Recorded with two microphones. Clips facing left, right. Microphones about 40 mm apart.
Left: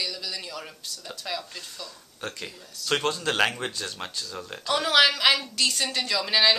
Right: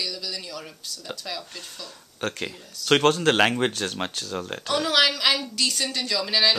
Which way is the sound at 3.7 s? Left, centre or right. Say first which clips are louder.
Right 5 dB; right.